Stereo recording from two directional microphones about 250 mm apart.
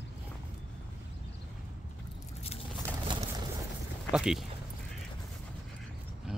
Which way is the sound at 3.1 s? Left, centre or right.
Centre.